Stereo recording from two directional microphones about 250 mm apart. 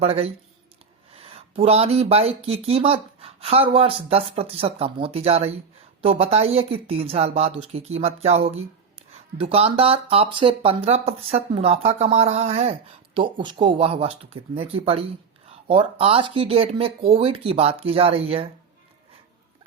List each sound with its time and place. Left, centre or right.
0.0 s speech: right